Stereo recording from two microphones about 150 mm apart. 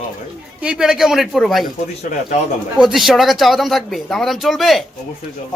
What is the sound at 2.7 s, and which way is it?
Speech, centre (ahead or behind).